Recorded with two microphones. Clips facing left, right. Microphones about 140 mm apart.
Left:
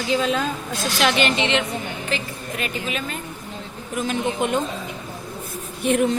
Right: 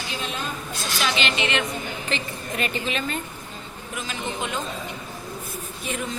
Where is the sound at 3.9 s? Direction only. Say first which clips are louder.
Left 8 dB; 50° left (ahead or behind).